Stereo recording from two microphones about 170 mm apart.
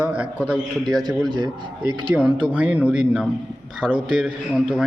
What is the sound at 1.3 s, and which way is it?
Speech, 25° right (ahead or behind).